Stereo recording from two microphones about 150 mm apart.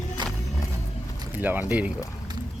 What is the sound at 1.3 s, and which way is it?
Speech, 10° right (ahead or behind).